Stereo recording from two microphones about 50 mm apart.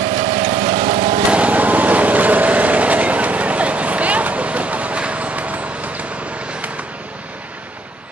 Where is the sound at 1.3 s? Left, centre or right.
Right.